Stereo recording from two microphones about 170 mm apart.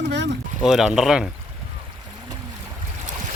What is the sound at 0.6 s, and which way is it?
Speech, centre (ahead or behind).